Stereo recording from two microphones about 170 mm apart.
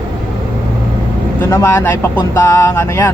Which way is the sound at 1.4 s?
15° left (ahead or behind).